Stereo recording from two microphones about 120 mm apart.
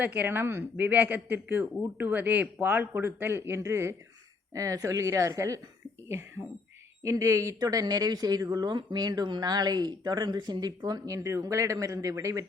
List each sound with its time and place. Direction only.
0.0 s a woman's voice: 15° right (ahead or behind)
7.0 s speech: 25° right (ahead or behind)